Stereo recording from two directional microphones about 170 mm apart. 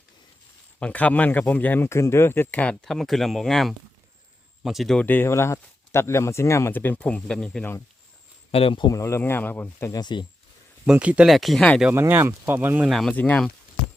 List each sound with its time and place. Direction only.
0.8 s speech: 10° left (ahead or behind)
8.5 s speech: 30° left (ahead or behind)
10.8 s speech: 10° right (ahead or behind)
11.9 s speech: 10° right (ahead or behind)
12.9 s speech: 5° left (ahead or behind)